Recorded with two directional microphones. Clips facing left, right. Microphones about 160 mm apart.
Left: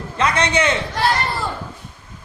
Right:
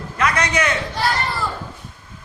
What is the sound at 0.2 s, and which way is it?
Speech, 25° left (ahead or behind).